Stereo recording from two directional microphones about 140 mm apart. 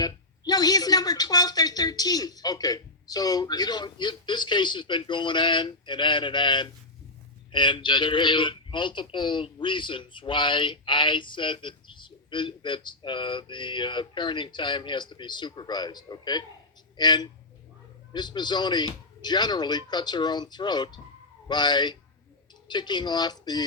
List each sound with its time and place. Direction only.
0.0 s speech: 30° left (ahead or behind)